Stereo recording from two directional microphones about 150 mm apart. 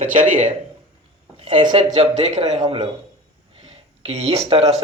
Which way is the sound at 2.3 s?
50° right (ahead or behind).